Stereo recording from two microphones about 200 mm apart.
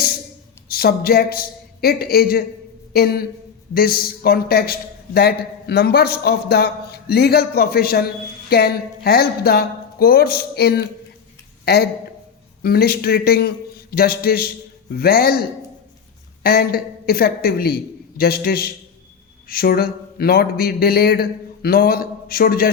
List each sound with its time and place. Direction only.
0.7 s a man's voice: 50° left (ahead or behind)